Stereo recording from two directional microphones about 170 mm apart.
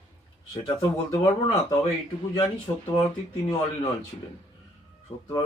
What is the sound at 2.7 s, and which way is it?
Speech, 30° left (ahead or behind).